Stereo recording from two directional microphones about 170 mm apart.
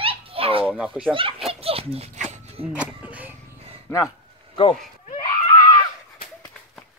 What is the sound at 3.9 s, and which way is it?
Speech, 15° left (ahead or behind).